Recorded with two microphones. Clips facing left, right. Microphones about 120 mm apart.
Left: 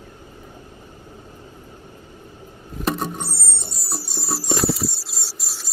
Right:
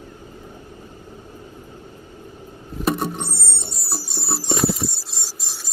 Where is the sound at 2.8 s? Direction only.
5° right (ahead or behind).